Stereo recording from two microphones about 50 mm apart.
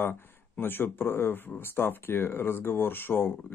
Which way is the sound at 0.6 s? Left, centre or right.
Left.